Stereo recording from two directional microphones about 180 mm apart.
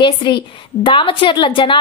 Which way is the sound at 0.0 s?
25° left (ahead or behind).